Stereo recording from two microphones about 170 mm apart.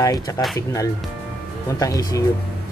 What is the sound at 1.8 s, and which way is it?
Speech, 20° left (ahead or behind).